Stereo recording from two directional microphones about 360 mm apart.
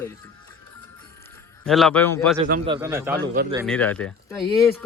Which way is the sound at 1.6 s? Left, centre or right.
Centre.